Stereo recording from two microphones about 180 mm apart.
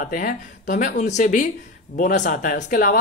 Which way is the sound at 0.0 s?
50° left (ahead or behind).